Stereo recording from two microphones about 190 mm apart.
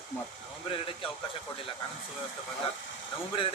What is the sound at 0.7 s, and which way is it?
Speech, 30° left (ahead or behind).